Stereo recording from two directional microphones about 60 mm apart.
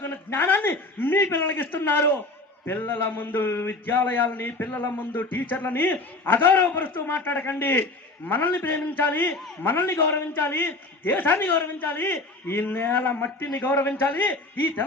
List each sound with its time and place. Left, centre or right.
0.0 s a man's voice: left
9.3 s a man's voice: centre
9.6 s speech: left